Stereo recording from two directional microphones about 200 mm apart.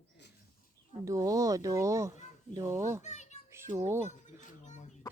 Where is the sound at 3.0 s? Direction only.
35° left (ahead or behind).